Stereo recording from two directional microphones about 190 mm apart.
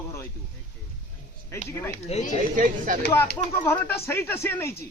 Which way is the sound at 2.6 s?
45° right (ahead or behind).